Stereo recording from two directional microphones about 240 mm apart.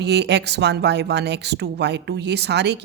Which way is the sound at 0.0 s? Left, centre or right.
Right.